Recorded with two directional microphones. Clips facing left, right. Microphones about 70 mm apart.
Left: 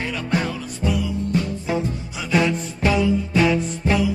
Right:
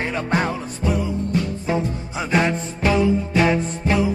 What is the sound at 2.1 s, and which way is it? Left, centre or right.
Music, right.